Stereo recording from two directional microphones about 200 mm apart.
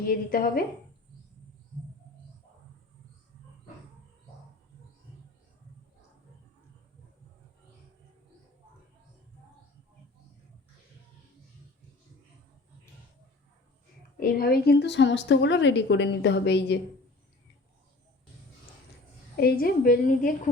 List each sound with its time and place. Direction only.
0.1 s a woman's voice: 45° left (ahead or behind)
14.2 s a woman's voice: 50° left (ahead or behind)
19.4 s a woman's voice: 50° left (ahead or behind)